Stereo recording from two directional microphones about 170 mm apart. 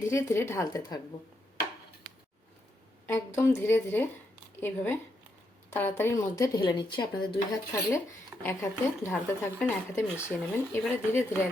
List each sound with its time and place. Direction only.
0.0 s speech: 15° left (ahead or behind)
3.1 s speech: 15° left (ahead or behind)